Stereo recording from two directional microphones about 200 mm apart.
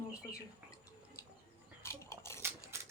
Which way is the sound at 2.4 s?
15° right (ahead or behind).